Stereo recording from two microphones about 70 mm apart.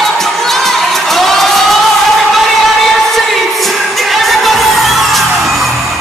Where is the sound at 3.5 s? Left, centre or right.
Centre.